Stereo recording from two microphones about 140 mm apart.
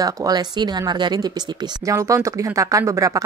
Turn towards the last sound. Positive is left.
turn(degrees=-20)  # may be behind; listen again after turning